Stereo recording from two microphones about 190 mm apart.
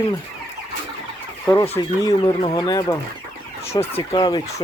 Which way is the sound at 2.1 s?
25° left (ahead or behind).